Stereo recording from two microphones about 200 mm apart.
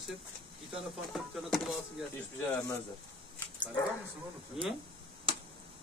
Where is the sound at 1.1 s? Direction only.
Centre (ahead or behind).